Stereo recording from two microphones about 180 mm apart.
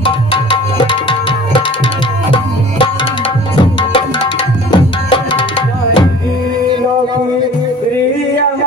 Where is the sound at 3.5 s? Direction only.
30° left (ahead or behind).